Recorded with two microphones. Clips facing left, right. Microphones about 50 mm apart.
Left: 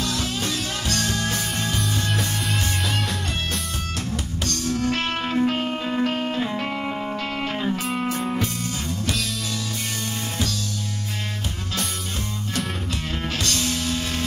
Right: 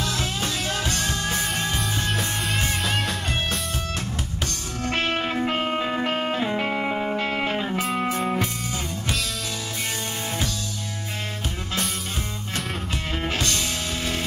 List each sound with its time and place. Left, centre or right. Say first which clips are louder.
0.0 s music: left 1 dB; centre
2.0 s music: even; centre
4.5 s music: left 9 dB; right
13.4 s music: left 3 dB; centre